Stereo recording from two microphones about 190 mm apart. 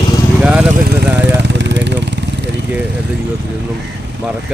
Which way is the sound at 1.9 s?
65° right (ahead or behind).